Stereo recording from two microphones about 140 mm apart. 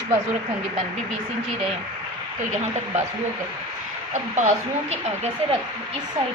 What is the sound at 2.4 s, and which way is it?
Speech, 60° right (ahead or behind).